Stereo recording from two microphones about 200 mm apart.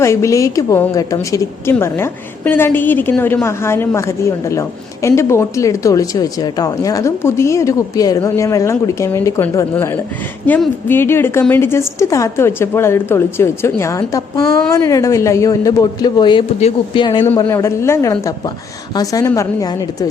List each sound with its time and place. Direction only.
0.0 s speech: 15° left (ahead or behind)